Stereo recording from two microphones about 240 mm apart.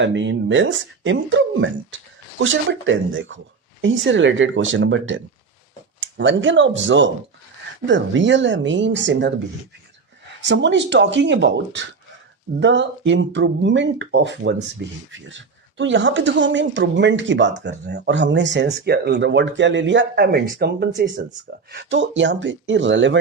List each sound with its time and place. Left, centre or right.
0.0 s speech: right
10.4 s speech: right